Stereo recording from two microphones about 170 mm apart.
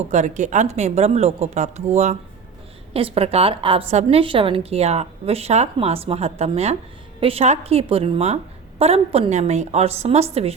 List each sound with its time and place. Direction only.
0.1 s a woman's voice: 45° right (ahead or behind)